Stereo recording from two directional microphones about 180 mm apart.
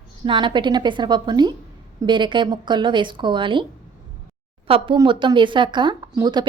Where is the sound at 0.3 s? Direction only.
25° right (ahead or behind).